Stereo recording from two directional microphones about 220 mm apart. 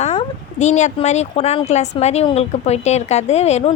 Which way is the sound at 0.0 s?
30° left (ahead or behind).